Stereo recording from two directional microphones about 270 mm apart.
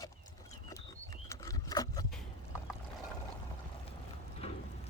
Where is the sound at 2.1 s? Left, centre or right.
Centre.